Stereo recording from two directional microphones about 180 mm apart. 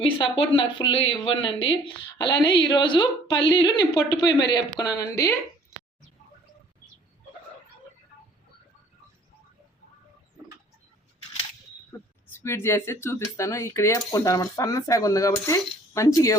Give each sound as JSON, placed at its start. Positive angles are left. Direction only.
{"t": 0.0, "sound": "speech", "side_deg": 30}
{"t": 12.4, "sound": "speech", "side_deg": 15}